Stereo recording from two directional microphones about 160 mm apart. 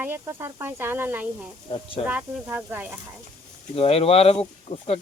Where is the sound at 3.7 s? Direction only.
40° left (ahead or behind).